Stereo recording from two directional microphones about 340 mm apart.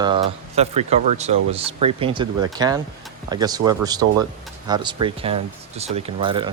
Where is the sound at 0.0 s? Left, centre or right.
Centre.